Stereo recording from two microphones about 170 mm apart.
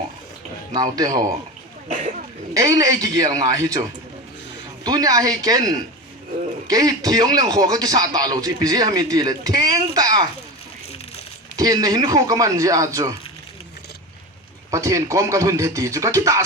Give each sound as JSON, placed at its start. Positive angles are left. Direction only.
{"t": 0.7, "sound": "speech", "side_deg": -20}
{"t": 1.9, "sound": "speech", "side_deg": -45}
{"t": 2.5, "sound": "speech", "side_deg": -20}
{"t": 4.8, "sound": "speech", "side_deg": -20}
{"t": 11.5, "sound": "speech", "side_deg": -20}
{"t": 14.7, "sound": "speech", "side_deg": -20}